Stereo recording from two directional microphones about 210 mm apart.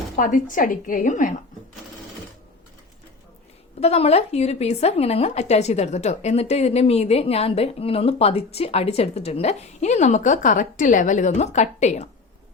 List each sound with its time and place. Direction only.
0.2 s a woman's voice: 40° left (ahead or behind)
3.8 s a woman's voice: 30° left (ahead or behind)